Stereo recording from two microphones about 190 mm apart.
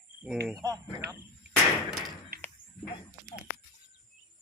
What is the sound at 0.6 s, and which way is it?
Speech, 20° right (ahead or behind).